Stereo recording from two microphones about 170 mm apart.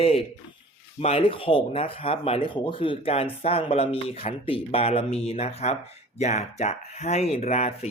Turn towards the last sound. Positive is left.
turn(degrees=40)  # may be behind; listen again after turning